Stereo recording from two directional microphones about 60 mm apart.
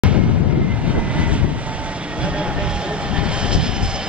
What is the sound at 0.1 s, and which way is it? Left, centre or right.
Vehicle, right.